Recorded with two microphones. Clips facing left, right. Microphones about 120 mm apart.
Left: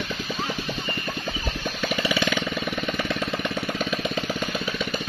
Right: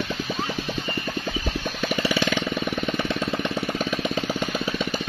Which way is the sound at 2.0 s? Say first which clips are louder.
Right 1 dB; 30° right (ahead or behind).